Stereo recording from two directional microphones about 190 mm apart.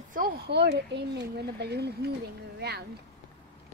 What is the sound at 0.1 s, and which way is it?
Speech, 55° right (ahead or behind).